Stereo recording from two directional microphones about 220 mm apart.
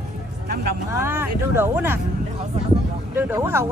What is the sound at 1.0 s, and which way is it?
Speech, 10° right (ahead or behind).